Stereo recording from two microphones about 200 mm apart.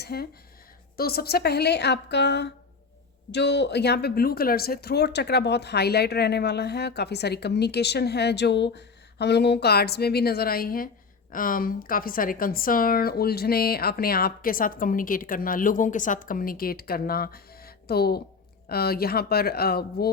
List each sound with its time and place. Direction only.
0.0 s a woman's voice: 50° left (ahead or behind)